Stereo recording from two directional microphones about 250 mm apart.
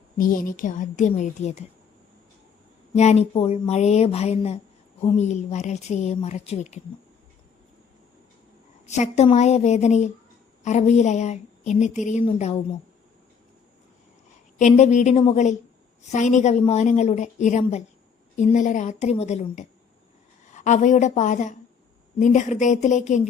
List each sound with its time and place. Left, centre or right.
0.2 s speech: left
2.9 s speech: left
8.9 s speech: left
14.6 s speech: left